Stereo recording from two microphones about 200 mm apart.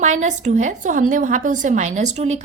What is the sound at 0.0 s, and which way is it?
A woman's voice, 35° right (ahead or behind).